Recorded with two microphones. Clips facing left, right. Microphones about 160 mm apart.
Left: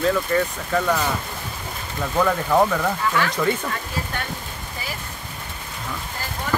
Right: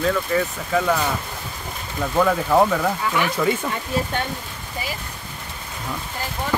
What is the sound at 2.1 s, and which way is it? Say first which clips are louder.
Speech: right 1 dB; 5° right (ahead or behind).